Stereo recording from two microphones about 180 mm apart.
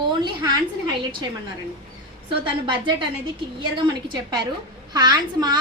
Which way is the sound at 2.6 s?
25° right (ahead or behind).